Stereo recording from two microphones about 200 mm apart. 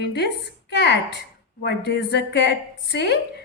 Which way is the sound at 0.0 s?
55° left (ahead or behind).